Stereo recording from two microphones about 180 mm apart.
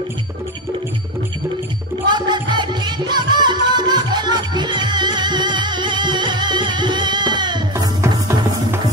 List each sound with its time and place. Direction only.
2.0 s music: 25° right (ahead or behind)